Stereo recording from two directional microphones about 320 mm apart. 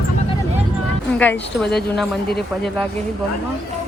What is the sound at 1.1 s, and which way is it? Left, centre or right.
Speech, centre.